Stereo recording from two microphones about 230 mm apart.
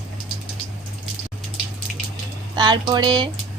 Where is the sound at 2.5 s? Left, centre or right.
Right.